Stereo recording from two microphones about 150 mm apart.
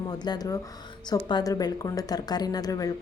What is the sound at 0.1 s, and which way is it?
A woman's voice, 30° left (ahead or behind).